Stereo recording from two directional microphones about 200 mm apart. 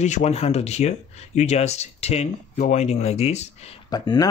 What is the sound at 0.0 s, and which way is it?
Speech, 35° left (ahead or behind).